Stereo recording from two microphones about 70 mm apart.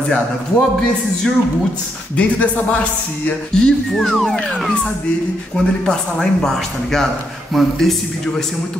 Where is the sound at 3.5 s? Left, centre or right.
Centre.